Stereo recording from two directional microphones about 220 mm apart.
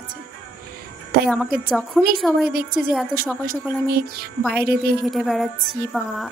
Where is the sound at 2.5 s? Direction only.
40° right (ahead or behind).